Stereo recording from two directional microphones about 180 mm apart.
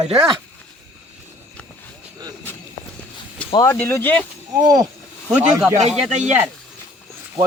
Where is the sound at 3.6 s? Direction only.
15° left (ahead or behind).